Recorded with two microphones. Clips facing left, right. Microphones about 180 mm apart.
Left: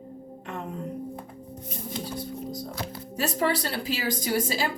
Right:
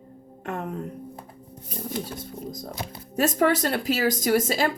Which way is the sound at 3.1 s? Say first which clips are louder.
Right 5 dB; 50° right (ahead or behind).